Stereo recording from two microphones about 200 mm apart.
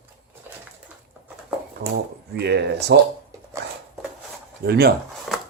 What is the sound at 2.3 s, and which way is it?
Speech, 55° right (ahead or behind).